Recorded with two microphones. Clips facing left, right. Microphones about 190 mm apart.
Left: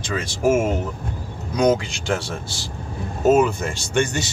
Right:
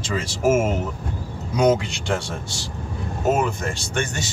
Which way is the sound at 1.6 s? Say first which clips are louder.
Even; centre (ahead or behind).